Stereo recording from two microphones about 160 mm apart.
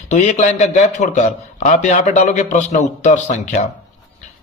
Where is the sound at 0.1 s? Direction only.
45° left (ahead or behind).